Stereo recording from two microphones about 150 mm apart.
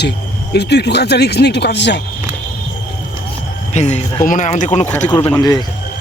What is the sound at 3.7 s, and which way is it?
Speech, 50° left (ahead or behind).